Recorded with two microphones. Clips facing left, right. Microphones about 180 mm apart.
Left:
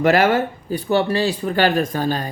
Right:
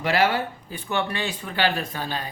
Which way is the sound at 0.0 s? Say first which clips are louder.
Left 7 dB; 50° left (ahead or behind).